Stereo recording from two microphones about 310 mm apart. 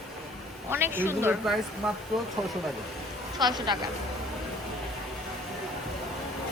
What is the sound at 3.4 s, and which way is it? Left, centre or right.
Speech, centre.